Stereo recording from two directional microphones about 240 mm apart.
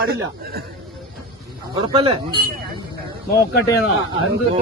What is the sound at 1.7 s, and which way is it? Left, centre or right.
Speech, right.